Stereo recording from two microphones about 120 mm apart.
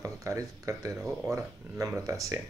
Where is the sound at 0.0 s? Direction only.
25° right (ahead or behind).